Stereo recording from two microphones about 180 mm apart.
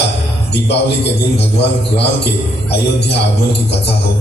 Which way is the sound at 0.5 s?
70° left (ahead or behind).